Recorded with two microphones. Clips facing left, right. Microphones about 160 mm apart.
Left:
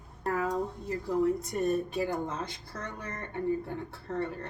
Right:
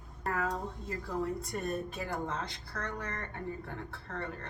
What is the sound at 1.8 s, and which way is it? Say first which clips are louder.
A woman's voice: left 5 dB; 20° left (ahead or behind).